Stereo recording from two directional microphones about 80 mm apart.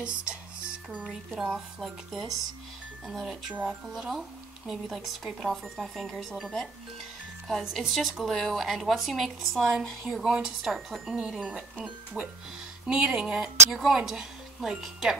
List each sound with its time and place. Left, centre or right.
0.0 s music: centre
1.4 s a woman's voice: centre
3.5 s a woman's voice: centre
3.9 s a woman's voice: centre
7.4 s a woman's voice: centre